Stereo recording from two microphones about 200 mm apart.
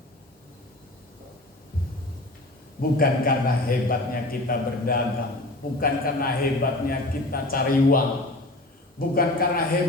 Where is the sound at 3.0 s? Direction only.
45° left (ahead or behind).